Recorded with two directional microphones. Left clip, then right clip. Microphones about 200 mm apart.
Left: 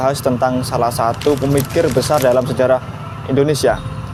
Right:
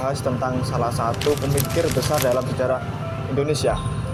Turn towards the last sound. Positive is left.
turn(degrees=50)  # may be behind; listen again after turning